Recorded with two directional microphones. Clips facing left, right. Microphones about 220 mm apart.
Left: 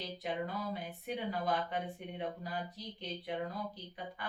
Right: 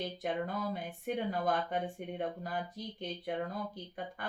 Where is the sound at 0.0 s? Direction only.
50° right (ahead or behind).